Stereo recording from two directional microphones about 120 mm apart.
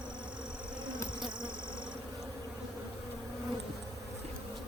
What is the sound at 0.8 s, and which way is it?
Bee, 40° right (ahead or behind).